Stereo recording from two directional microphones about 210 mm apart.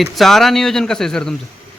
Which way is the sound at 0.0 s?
Centre (ahead or behind).